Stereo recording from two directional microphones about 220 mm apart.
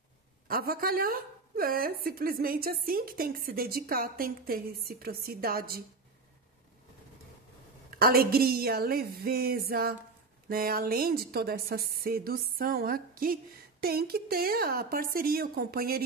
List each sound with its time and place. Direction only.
0.5 s a woman's voice: 40° right (ahead or behind)
7.9 s speech: 40° right (ahead or behind)